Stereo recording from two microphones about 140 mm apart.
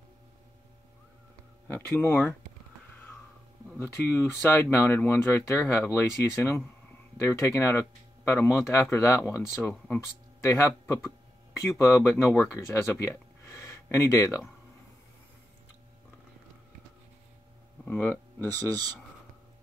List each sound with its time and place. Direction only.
1.7 s speech: 15° left (ahead or behind)
3.8 s speech: 15° left (ahead or behind)
13.0 s a sound: 20° left (ahead or behind)
17.8 s speech: 15° left (ahead or behind)